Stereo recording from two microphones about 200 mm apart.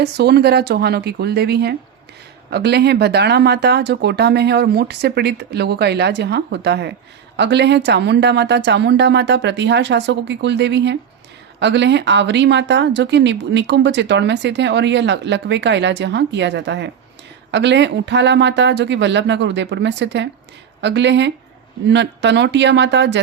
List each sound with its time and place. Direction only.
0.0 s speech: 55° right (ahead or behind)